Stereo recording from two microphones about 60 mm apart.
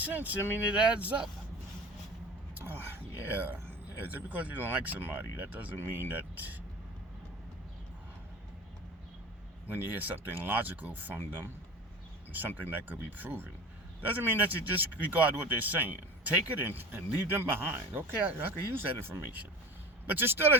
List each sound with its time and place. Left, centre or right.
0.0 s speech: right
2.6 s speech: right
9.6 s speech: right
20.1 s speech: right